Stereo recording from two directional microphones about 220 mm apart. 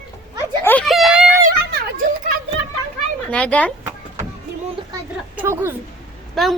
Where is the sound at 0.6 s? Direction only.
5° left (ahead or behind).